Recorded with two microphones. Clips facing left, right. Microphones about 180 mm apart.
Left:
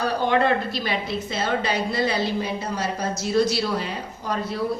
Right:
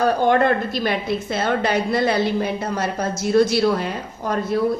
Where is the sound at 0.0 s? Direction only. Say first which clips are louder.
Right 4 dB; 50° right (ahead or behind).